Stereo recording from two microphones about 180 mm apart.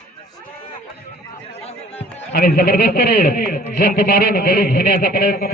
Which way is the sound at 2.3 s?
60° left (ahead or behind).